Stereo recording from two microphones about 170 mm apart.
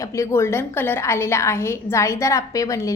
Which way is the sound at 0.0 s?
20° left (ahead or behind).